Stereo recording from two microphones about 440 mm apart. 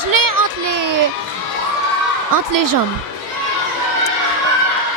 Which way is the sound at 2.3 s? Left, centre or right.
Right.